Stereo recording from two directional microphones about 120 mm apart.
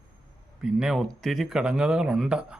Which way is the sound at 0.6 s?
5° right (ahead or behind).